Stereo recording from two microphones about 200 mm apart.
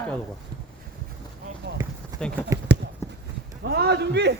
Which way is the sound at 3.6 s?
55° right (ahead or behind).